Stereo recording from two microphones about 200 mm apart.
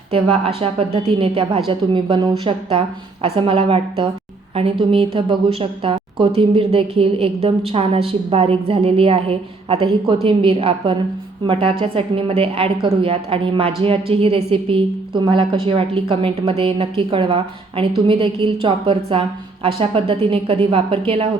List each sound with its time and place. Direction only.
0.1 s a woman's voice: 30° right (ahead or behind)